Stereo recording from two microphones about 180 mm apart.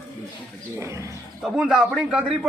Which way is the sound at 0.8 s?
15° right (ahead or behind).